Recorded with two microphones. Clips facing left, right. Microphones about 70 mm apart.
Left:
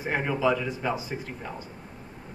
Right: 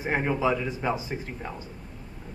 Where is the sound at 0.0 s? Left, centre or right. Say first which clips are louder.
Even; right.